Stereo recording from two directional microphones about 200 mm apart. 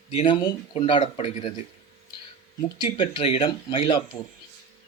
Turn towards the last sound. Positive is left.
turn(degrees=25)  # may be behind; listen again after turning